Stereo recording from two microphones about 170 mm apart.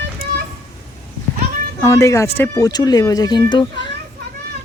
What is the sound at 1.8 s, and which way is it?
Speech, 15° left (ahead or behind).